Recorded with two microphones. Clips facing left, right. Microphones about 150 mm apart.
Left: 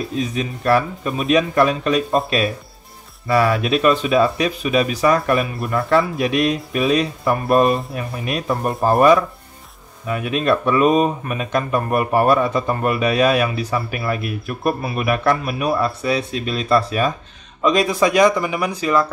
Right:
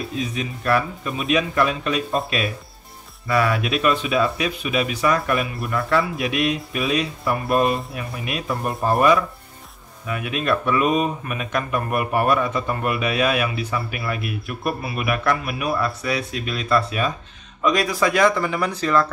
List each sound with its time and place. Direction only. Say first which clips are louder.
0.4 s speech: left 4 dB; 35° left (ahead or behind)
3.3 s speech: left 4 dB; 35° left (ahead or behind)
17.6 s speech: left 4 dB; 25° left (ahead or behind)